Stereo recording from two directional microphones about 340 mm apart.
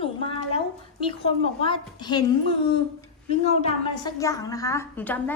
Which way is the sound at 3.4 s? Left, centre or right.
Centre.